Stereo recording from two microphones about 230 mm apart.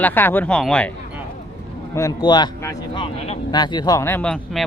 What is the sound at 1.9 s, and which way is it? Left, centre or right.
A man's voice, centre.